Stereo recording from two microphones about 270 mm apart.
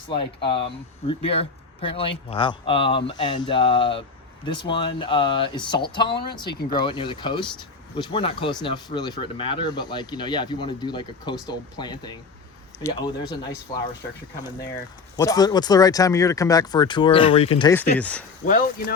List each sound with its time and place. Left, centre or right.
0.2 s a man's voice: centre
15.1 s speech: centre
17.9 s speech: centre
18.4 s a man's voice: left